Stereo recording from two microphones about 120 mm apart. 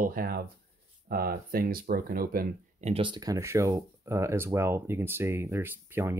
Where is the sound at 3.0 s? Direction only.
35° right (ahead or behind).